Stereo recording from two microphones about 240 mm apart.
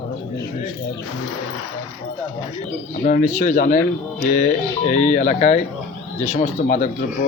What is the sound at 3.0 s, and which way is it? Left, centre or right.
Speech, left.